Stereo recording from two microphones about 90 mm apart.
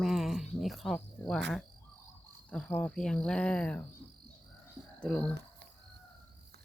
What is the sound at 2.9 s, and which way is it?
Speech, 10° left (ahead or behind).